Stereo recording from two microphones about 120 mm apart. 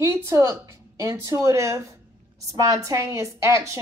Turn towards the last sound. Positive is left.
turn(degrees=-25)  # may be behind; listen again after turning